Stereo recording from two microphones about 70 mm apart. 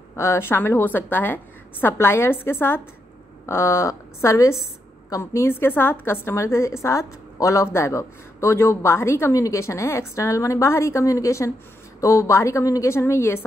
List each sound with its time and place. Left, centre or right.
0.1 s a woman's voice: left
9.3 s a woman's voice: left
12.8 s a woman's voice: left